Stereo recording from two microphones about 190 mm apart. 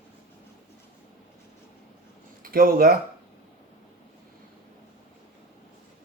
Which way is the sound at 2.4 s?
50° right (ahead or behind).